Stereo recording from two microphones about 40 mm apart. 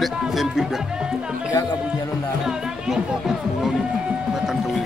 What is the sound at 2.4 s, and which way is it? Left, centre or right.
Music, centre.